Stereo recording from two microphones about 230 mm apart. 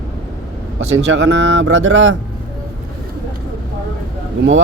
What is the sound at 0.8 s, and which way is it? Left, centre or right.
Speech, right.